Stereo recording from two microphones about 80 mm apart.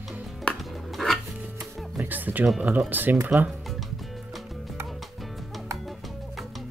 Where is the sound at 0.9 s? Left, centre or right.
Centre.